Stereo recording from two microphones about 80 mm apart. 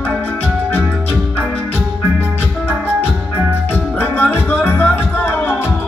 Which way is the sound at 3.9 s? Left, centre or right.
Left.